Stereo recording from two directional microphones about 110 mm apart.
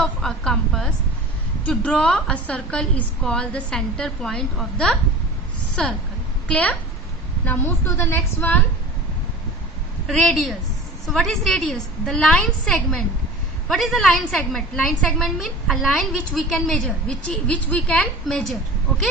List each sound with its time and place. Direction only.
0.0 s a sound: 5° left (ahead or behind)
1.6 s a woman's voice: 10° left (ahead or behind)
6.5 s a woman's voice: 10° left (ahead or behind)
10.1 s a woman's voice: 5° left (ahead or behind)